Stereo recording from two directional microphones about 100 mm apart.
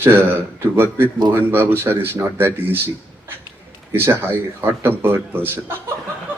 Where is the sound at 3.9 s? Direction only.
25° right (ahead or behind).